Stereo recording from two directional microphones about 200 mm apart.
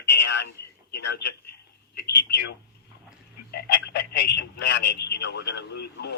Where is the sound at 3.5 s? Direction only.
55° left (ahead or behind).